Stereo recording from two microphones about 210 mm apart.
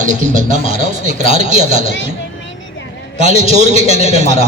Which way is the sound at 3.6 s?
35° right (ahead or behind).